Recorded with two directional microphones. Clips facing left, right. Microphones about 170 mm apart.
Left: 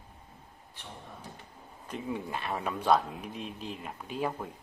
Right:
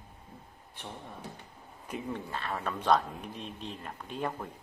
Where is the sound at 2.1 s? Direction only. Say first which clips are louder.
Left 4 dB; 15° left (ahead or behind).